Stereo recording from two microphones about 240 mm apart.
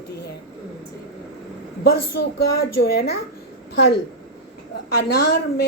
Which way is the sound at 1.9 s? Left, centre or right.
Left.